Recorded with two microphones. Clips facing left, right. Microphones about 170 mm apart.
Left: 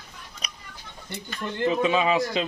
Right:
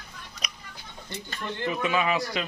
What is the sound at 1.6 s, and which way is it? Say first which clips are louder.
Speech: left 5 dB; 25° left (ahead or behind).